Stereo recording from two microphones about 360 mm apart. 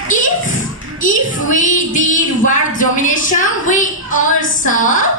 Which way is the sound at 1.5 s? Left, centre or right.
Left.